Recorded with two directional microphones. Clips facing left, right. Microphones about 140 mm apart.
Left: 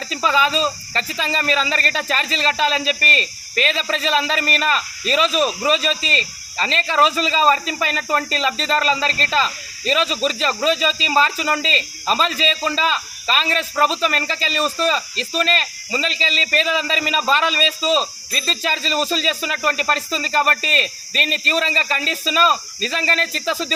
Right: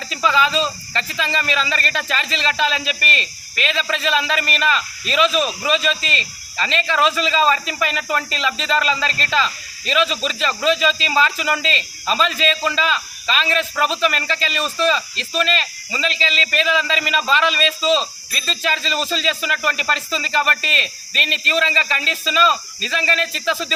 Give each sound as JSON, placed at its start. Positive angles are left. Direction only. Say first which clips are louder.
{"t": 0.1, "sound": "speech", "louder": "right 1 dB", "side_deg": 35}